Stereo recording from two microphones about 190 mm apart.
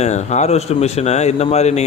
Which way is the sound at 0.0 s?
35° left (ahead or behind).